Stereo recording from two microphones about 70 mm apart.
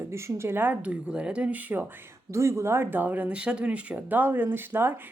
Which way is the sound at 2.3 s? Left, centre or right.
Right.